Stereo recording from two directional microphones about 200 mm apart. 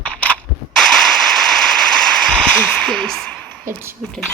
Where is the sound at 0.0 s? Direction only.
5° left (ahead or behind).